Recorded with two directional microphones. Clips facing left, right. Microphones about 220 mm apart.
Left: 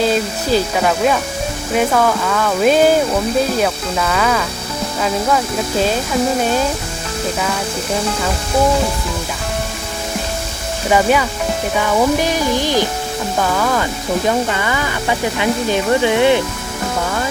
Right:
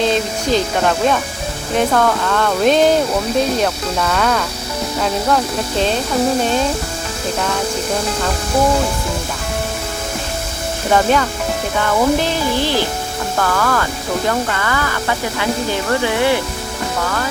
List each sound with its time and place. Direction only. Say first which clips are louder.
0.0 s speech: even; 5° left (ahead or behind)
10.8 s speech: left 1 dB; 10° left (ahead or behind)